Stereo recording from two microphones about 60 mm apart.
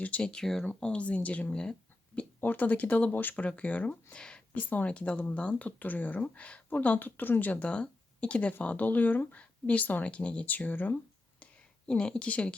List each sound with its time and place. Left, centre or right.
0.2 s speech: centre
4.2 s a sound: centre
4.7 s speech: left
11.9 s speech: centre